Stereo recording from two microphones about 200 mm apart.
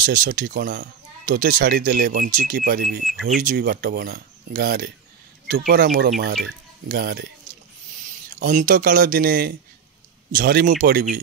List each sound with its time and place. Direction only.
0.0 s speech: 45° right (ahead or behind)
8.3 s speech: 45° right (ahead or behind)